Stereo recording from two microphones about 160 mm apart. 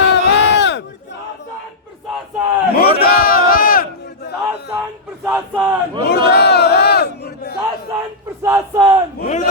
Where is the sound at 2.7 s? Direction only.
70° left (ahead or behind).